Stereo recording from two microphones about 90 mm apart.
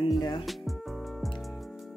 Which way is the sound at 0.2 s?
60° left (ahead or behind).